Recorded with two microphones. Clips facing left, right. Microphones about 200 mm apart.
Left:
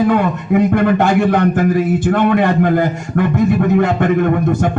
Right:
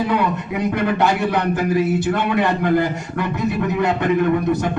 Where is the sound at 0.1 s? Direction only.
50° left (ahead or behind).